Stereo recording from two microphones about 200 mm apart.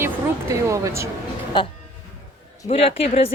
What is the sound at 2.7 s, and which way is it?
Speech, 30° left (ahead or behind).